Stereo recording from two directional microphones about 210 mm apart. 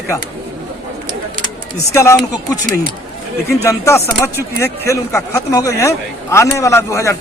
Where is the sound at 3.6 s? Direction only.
15° left (ahead or behind).